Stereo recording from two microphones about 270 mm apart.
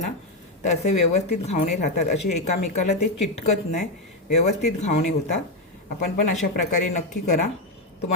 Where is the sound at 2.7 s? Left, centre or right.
Left.